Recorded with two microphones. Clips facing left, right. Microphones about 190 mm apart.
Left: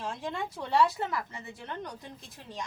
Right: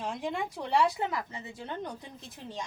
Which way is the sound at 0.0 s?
15° right (ahead or behind).